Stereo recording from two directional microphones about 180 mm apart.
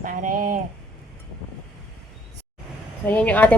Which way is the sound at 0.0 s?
50° right (ahead or behind).